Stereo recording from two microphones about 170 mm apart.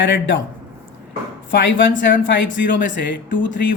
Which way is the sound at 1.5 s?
90° left.